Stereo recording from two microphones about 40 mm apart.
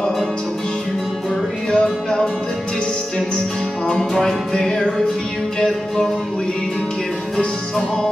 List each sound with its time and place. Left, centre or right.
1.7 s music: centre
4.6 s music: centre